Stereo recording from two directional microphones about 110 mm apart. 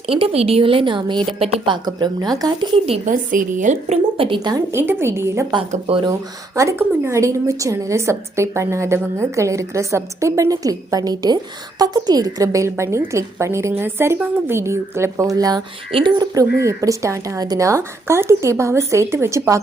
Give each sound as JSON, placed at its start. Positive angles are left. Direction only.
{"t": 0.1, "sound": "a woman's voice", "side_deg": -60}
{"t": 1.4, "sound": "a woman's voice", "side_deg": -60}
{"t": 1.7, "sound": "speech", "side_deg": -40}
{"t": 2.7, "sound": "a woman's voice", "side_deg": -60}
{"t": 3.7, "sound": "speech", "side_deg": -90}
{"t": 4.4, "sound": "speech", "side_deg": -35}
{"t": 4.7, "sound": "a woman's voice", "side_deg": -20}
{"t": 5.8, "sound": "speech", "side_deg": -55}
{"t": 6.1, "sound": "a woman's voice", "side_deg": -30}
{"t": 15.9, "sound": "speech", "side_deg": -55}
{"t": 16.1, "sound": "a woman's voice", "side_deg": -30}